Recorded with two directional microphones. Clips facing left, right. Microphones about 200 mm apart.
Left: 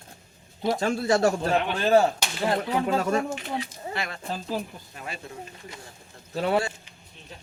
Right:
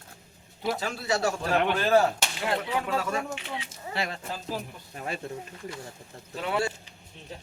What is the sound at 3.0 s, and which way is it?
Speech, 40° left (ahead or behind).